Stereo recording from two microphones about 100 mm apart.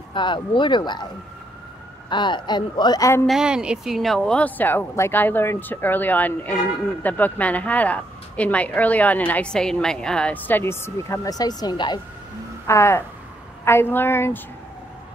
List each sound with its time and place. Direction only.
0.1 s speech: 55° left (ahead or behind)
2.0 s speech: 50° left (ahead or behind)
3.3 s speech: 5° right (ahead or behind)
4.4 s speech: 15° left (ahead or behind)
11.2 s speech: 40° left (ahead or behind)
12.6 s a woman's voice: 25° left (ahead or behind)